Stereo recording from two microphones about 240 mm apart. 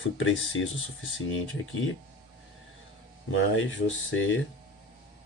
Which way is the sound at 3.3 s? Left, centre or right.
Left.